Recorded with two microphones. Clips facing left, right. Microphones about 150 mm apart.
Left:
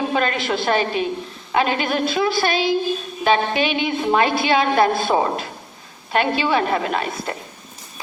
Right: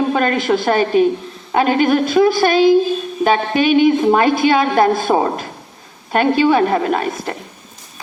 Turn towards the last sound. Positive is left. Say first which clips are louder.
# right 5 dB
turn(degrees=-45)  # may be behind; listen again after turning